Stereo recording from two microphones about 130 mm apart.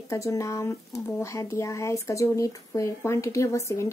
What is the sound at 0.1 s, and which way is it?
Speech, 25° left (ahead or behind).